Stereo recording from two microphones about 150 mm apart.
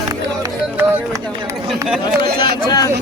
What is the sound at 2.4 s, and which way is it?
Speech, 30° left (ahead or behind).